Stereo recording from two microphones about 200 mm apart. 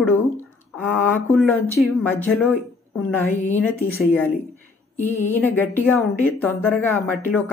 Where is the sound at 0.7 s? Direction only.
10° left (ahead or behind).